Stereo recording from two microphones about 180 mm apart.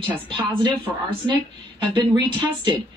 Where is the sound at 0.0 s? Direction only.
25° right (ahead or behind).